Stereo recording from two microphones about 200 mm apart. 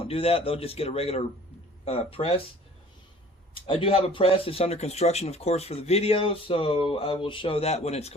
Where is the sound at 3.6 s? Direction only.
25° left (ahead or behind).